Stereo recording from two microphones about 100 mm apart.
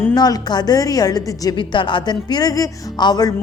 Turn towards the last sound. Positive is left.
turn(degrees=40)  # may be behind; listen again after turning